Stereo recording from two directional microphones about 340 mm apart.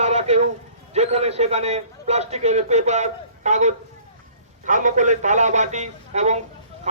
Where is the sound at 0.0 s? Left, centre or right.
Centre.